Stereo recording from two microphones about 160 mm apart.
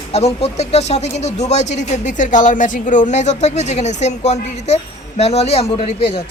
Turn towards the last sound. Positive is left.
turn(degrees=35)  # may be behind; listen again after turning